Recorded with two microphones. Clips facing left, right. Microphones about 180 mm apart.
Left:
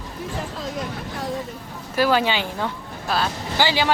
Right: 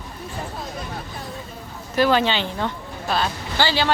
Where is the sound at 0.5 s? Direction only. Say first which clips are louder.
Left 3 dB; 90° left.